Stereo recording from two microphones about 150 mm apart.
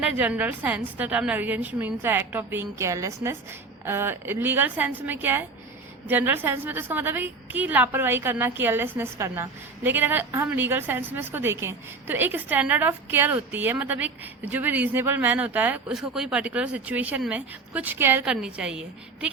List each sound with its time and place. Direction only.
0.0 s a woman's voice: 10° right (ahead or behind)